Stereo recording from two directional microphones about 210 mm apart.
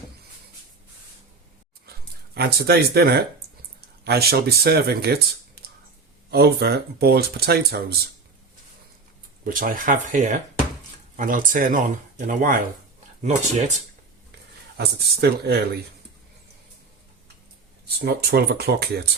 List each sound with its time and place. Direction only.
2.3 s speech: 50° right (ahead or behind)
9.4 s speech: 40° right (ahead or behind)
14.8 s speech: 50° right (ahead or behind)
17.8 s speech: 50° right (ahead or behind)